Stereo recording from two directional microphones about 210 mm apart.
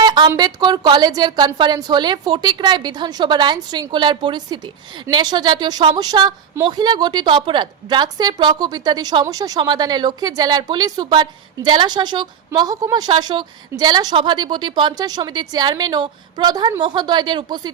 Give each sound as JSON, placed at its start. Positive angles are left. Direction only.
{"t": 0.0, "sound": "a woman's voice", "side_deg": -20}